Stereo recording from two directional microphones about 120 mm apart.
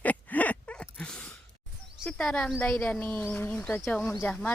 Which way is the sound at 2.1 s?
5° left (ahead or behind).